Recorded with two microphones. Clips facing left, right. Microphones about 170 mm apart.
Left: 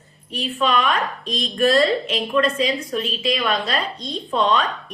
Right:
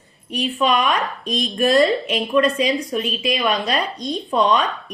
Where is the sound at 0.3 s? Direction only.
15° right (ahead or behind).